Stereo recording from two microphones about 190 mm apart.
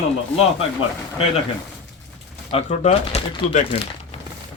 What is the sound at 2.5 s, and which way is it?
Speech, 35° left (ahead or behind).